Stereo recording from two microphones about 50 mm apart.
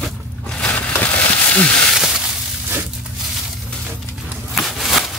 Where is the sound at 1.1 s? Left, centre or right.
Left.